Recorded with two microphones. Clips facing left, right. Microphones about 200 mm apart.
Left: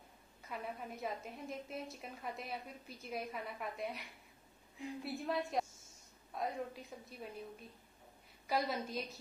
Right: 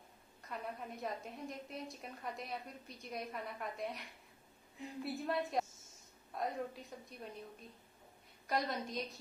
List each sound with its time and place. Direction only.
0.4 s a woman's voice: centre (ahead or behind)
8.5 s a woman's voice: 5° left (ahead or behind)